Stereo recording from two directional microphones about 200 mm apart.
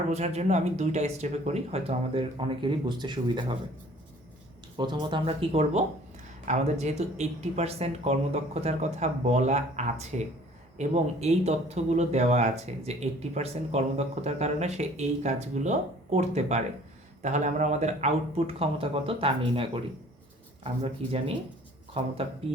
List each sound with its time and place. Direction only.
0.1 s speech: 35° right (ahead or behind)
4.8 s speech: 20° right (ahead or behind)
20.8 s speech: 30° right (ahead or behind)